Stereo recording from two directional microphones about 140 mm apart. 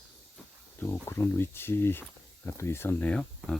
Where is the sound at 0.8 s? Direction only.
20° left (ahead or behind).